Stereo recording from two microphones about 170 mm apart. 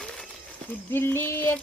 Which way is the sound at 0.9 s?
15° left (ahead or behind).